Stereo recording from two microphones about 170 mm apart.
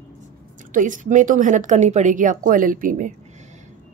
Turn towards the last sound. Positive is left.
turn(degrees=-50)  # may be behind; listen again after turning